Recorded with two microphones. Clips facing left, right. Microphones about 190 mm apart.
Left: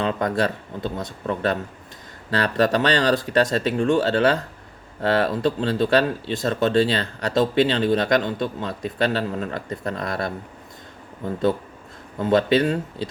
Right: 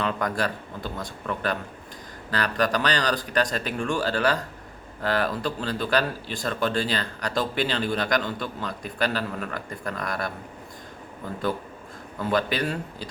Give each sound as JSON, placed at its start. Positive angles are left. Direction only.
{"t": 0.0, "sound": "speech", "side_deg": 25}
{"t": 12.2, "sound": "speech", "side_deg": 25}